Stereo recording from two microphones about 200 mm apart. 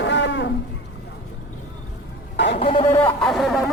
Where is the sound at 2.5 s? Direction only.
30° left (ahead or behind).